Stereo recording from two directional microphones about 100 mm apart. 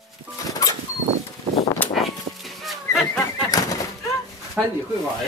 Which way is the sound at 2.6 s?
Centre (ahead or behind).